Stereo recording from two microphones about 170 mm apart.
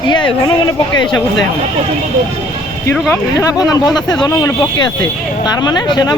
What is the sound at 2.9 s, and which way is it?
Speech, 10° left (ahead or behind).